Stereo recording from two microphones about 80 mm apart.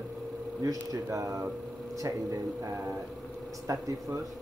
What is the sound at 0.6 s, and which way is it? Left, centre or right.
Speech, right.